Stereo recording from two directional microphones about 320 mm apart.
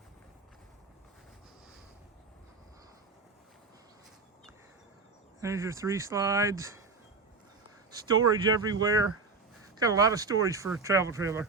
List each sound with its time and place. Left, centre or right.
5.4 s speech: centre
7.9 s speech: centre